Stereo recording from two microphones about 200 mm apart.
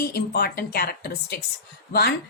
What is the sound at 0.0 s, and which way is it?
Speech, 50° left (ahead or behind).